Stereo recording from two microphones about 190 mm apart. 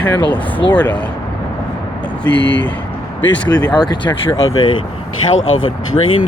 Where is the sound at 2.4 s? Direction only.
70° left (ahead or behind).